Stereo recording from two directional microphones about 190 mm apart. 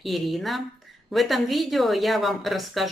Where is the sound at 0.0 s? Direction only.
Centre (ahead or behind).